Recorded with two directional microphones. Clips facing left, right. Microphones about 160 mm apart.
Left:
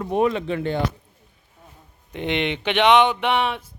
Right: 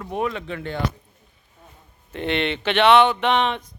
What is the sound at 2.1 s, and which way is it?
Speech, 15° left (ahead or behind).